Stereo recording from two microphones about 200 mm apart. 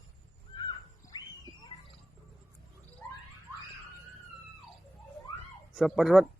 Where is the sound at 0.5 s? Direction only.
20° left (ahead or behind).